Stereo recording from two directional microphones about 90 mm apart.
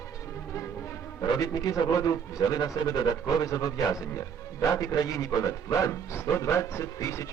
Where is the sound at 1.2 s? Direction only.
45° left (ahead or behind).